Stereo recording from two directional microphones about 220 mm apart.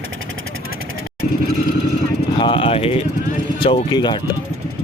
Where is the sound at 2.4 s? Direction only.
25° left (ahead or behind).